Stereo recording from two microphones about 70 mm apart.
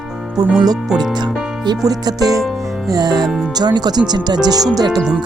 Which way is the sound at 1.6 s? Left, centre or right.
Right.